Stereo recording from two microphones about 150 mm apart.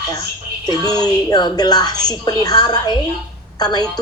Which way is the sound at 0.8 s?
25° left (ahead or behind).